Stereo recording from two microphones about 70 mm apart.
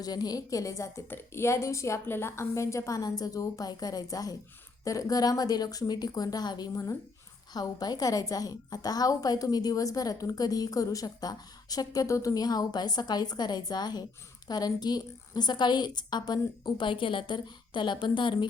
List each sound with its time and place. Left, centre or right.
0.0 s a woman's voice: left
1.1 s a woman's voice: left
7.5 s a woman's voice: left
15.4 s a woman's voice: left